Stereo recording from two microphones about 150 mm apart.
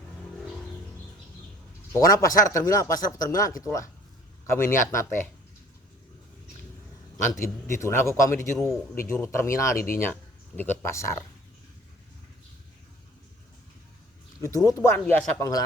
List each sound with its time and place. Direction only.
1.9 s speech: 25° left (ahead or behind)
7.4 s speech: 20° left (ahead or behind)
14.4 s speech: 20° left (ahead or behind)
14.9 s speech: 10° left (ahead or behind)
15.4 s speech: 25° left (ahead or behind)